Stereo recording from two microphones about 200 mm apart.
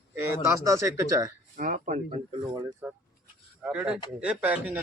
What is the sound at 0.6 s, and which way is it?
Speech, 15° right (ahead or behind).